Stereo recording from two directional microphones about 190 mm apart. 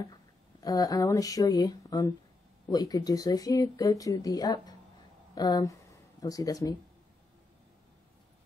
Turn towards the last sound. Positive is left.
turn(degrees=20)  # may be behind; listen again after turning